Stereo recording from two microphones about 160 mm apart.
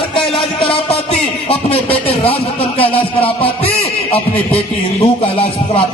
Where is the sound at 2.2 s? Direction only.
35° left (ahead or behind).